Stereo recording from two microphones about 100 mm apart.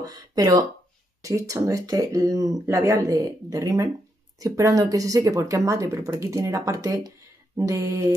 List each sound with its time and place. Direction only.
0.0 s speech: 40° right (ahead or behind)
7.5 s mantra: 30° right (ahead or behind)